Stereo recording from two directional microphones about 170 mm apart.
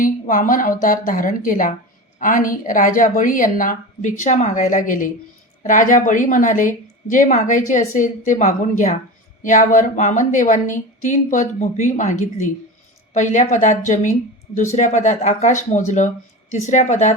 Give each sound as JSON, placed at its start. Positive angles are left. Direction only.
{"t": 0.0, "sound": "speech", "side_deg": 55}